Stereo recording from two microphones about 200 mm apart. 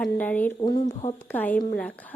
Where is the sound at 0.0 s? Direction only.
10° left (ahead or behind).